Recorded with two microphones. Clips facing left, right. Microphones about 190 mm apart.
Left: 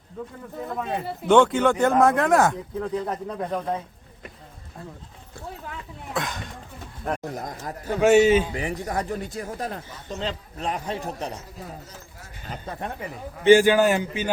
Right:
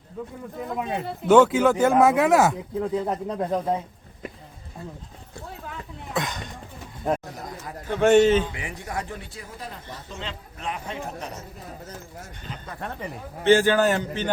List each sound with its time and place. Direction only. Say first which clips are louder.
0.2 s speech: right 1 dB; 10° right (ahead or behind)
2.8 s speech: right 2 dB; 20° right (ahead or behind)
6.1 s speech: right 1 dB; centre (ahead or behind)
7.9 s a man's voice: even; 5° left (ahead or behind)
8.5 s speech: left 5 dB; 35° left (ahead or behind)
13.0 s a man's voice: even; 10° left (ahead or behind)